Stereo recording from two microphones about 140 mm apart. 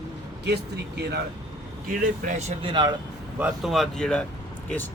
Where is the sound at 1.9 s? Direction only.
70° right (ahead or behind).